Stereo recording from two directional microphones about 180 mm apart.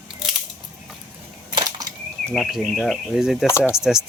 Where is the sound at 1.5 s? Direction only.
20° right (ahead or behind).